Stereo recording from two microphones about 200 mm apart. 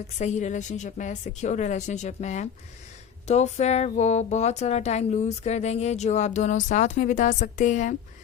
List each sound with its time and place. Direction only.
0.2 s speech: 35° left (ahead or behind)